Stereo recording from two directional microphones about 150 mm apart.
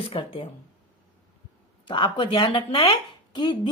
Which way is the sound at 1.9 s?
35° left (ahead or behind).